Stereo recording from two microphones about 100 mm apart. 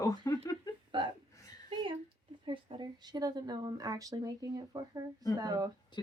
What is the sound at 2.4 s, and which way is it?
Speech, 45° right (ahead or behind).